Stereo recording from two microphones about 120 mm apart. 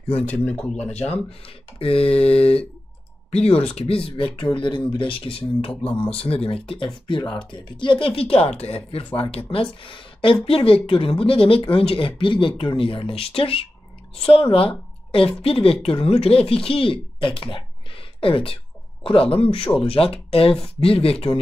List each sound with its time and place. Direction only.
0.2 s speech: 10° left (ahead or behind)
1.4 s speech: 50° left (ahead or behind)
5.7 s speech: 10° left (ahead or behind)
6.1 s speech: 55° left (ahead or behind)
8.2 s speech: 55° left (ahead or behind)